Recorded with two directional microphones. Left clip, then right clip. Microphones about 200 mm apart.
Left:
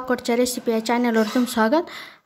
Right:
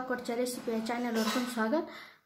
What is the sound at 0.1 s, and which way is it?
Speech, 50° left (ahead or behind).